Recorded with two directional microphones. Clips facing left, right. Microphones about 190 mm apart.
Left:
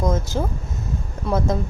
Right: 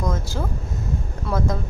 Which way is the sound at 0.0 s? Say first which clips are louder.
Left 4 dB; 20° left (ahead or behind).